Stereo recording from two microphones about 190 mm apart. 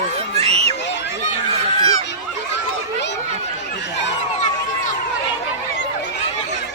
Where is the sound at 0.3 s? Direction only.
35° right (ahead or behind).